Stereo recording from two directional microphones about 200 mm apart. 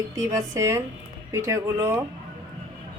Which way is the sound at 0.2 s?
15° right (ahead or behind).